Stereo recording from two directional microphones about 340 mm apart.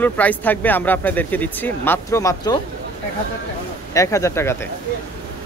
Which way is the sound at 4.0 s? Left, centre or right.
Centre.